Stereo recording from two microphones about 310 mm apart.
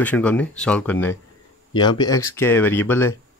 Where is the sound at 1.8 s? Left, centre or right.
Centre.